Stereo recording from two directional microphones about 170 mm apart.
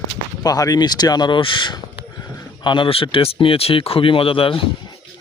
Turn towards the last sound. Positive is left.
turn(degrees=30)  # may be behind; listen again after turning